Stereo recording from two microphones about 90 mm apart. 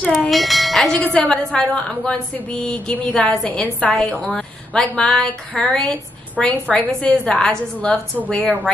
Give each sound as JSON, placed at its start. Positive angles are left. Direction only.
{"t": 0.3, "sound": "a woman's voice", "side_deg": 0}
{"t": 2.3, "sound": "a sound", "side_deg": 20}
{"t": 3.1, "sound": "a woman's voice", "side_deg": 10}